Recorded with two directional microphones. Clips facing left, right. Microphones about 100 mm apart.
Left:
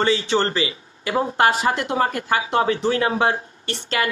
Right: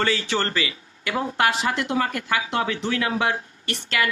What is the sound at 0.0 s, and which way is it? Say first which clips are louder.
Speech: left 4 dB; 25° left (ahead or behind).